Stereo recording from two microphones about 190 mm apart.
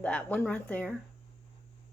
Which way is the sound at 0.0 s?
5° left (ahead or behind).